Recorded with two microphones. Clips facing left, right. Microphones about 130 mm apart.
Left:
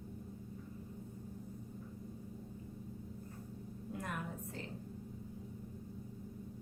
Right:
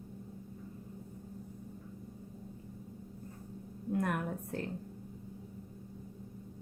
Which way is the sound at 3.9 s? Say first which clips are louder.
Right 10 dB; 55° right (ahead or behind).